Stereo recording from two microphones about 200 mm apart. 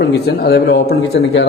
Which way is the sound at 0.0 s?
55° left (ahead or behind).